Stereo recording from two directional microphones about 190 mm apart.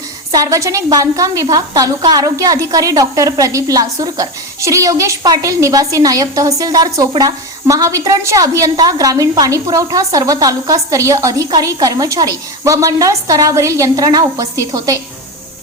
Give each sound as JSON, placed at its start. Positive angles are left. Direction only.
{"t": 0.3, "sound": "a woman's voice", "side_deg": -20}